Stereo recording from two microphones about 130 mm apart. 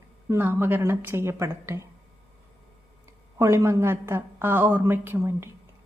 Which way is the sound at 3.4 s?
20° right (ahead or behind).